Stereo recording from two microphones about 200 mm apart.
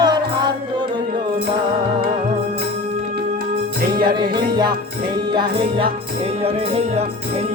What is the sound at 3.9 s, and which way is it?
Music, 50° right (ahead or behind).